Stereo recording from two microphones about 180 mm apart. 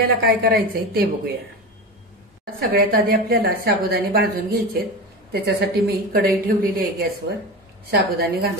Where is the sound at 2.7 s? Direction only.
55° right (ahead or behind).